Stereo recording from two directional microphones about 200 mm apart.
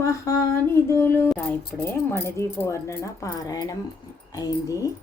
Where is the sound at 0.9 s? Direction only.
10° left (ahead or behind).